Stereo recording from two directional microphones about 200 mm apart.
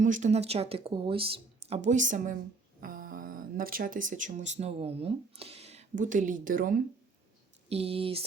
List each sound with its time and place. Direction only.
0.0 s a woman's voice: 40° right (ahead or behind)
7.7 s speech: 30° right (ahead or behind)